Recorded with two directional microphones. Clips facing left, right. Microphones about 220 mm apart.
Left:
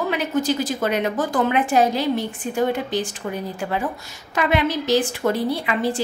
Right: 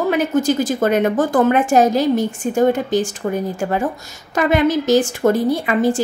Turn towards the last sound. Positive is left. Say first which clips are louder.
# right 6 dB
turn(degrees=-45)  # may be behind; listen again after turning